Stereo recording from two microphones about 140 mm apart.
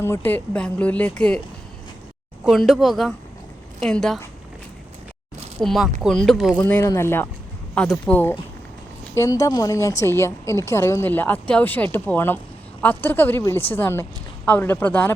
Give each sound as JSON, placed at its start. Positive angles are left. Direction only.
{"t": 0.0, "sound": "a woman's voice", "side_deg": 15}
{"t": 2.5, "sound": "speech", "side_deg": 0}
{"t": 5.6, "sound": "speech", "side_deg": 0}
{"t": 6.6, "sound": "a woman's voice", "side_deg": 10}